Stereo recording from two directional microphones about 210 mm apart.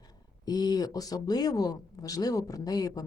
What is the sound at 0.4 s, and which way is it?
Speech, 20° left (ahead or behind).